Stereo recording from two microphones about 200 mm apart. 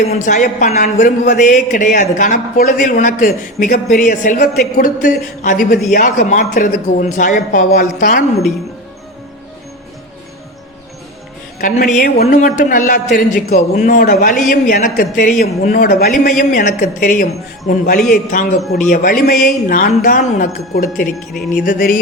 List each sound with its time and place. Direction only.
0.0 s speech: 35° left (ahead or behind)
11.6 s a man's voice: 45° left (ahead or behind)